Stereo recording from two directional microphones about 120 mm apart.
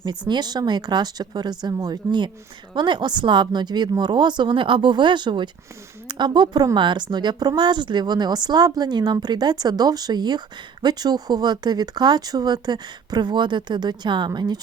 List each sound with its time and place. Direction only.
0.0 s speech: 35° right (ahead or behind)